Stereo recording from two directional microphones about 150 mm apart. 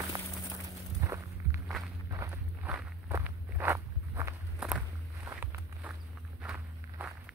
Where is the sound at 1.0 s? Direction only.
20° right (ahead or behind).